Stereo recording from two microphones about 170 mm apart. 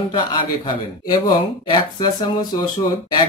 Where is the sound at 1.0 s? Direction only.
25° left (ahead or behind).